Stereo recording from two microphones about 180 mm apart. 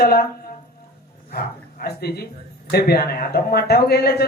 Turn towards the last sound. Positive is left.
turn(degrees=60)  # may be behind; listen again after turning